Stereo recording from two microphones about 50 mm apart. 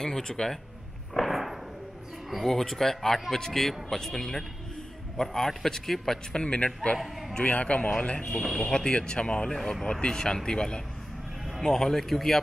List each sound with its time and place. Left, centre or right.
0.0 s a man's voice: centre
1.1 s a sound: centre
2.3 s a man's voice: centre
6.3 s speech: left
7.0 s a sound: centre
7.3 s a man's voice: left
9.6 s a man's voice: centre